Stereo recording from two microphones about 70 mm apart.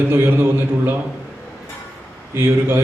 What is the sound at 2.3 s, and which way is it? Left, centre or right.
Speech, right.